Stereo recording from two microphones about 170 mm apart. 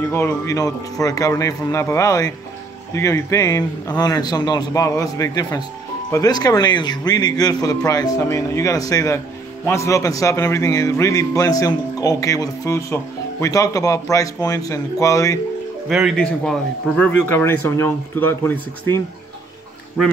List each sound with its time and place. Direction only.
0.1 s a man's voice: 15° left (ahead or behind)
15.9 s speech: centre (ahead or behind)